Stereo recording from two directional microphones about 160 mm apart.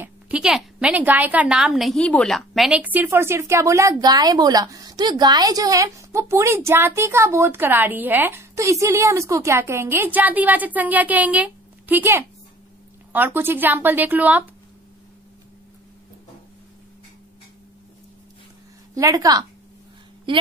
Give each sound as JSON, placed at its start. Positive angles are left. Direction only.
{"t": 0.0, "sound": "a woman's voice", "side_deg": -5}
{"t": 18.9, "sound": "a woman's voice", "side_deg": -20}